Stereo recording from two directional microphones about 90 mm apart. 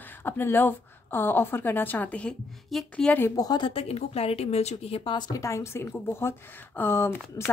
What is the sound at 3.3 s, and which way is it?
Speech, 50° left (ahead or behind).